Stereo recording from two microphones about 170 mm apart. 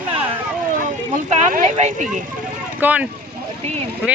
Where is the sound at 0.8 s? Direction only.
50° right (ahead or behind).